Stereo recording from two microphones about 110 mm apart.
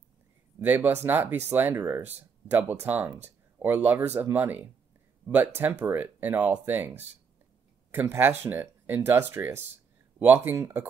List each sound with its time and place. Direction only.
0.6 s speech: 15° right (ahead or behind)